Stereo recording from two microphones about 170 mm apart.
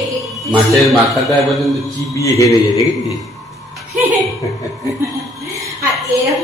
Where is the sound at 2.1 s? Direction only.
20° left (ahead or behind).